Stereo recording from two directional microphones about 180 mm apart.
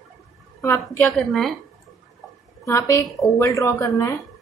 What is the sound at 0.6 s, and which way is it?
Speech, 15° left (ahead or behind).